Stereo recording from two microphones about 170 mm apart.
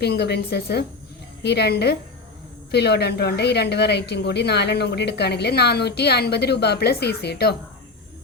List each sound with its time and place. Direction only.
0.0 s speech: 75° left (ahead or behind)